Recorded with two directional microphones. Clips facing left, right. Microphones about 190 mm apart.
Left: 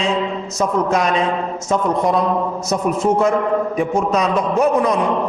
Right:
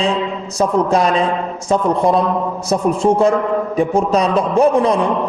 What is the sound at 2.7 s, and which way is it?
A man's voice, 30° right (ahead or behind).